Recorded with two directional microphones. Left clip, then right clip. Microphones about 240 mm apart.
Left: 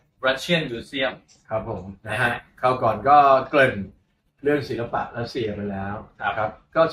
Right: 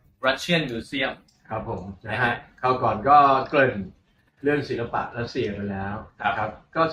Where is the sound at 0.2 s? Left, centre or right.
Centre.